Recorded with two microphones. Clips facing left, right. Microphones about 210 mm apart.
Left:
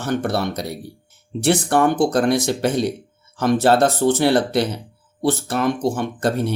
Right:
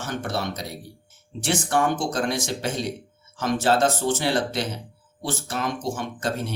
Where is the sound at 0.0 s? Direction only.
60° left (ahead or behind).